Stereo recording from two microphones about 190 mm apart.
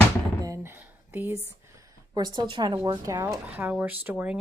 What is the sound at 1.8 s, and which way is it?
Speech, 20° right (ahead or behind).